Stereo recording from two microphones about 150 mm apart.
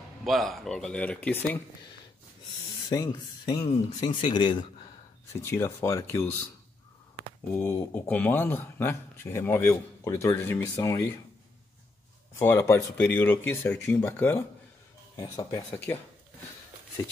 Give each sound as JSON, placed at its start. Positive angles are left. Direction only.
{"t": 0.2, "sound": "speech", "side_deg": 0}
{"t": 2.9, "sound": "speech", "side_deg": 25}
{"t": 5.3, "sound": "speech", "side_deg": 15}
{"t": 7.5, "sound": "speech", "side_deg": 15}
{"t": 12.4, "sound": "speech", "side_deg": 15}
{"t": 15.1, "sound": "speech", "side_deg": 25}